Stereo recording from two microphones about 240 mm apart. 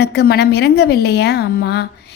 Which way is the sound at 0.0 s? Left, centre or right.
Left.